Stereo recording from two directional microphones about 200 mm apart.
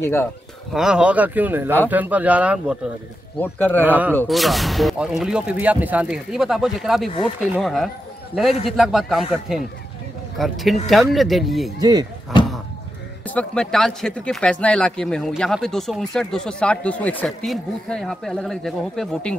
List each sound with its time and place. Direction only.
0.0 s a man's voice: 10° left (ahead or behind)
0.7 s speech: 5° right (ahead or behind)
3.3 s a man's voice: 10° left (ahead or behind)
3.8 s speech: 10° right (ahead or behind)
4.1 s speech: 5° left (ahead or behind)
11.8 s speech: 20° right (ahead or behind)
13.3 s speech: 5° left (ahead or behind)